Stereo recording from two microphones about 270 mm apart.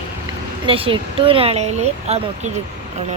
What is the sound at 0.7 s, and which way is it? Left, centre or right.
Speech, centre.